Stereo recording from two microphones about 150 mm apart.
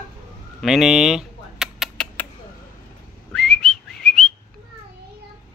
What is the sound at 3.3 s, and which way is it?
Whistling, 5° left (ahead or behind).